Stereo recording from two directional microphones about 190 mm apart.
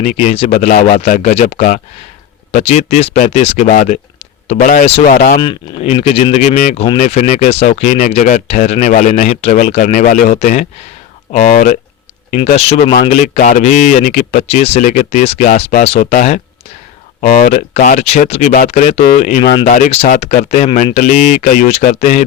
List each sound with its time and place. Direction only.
0.0 s speech: 35° left (ahead or behind)
4.5 s speech: 45° left (ahead or behind)
5.3 s speech: 30° left (ahead or behind)